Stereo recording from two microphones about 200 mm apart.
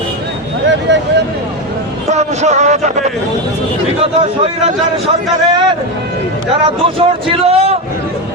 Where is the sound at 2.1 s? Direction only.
35° right (ahead or behind).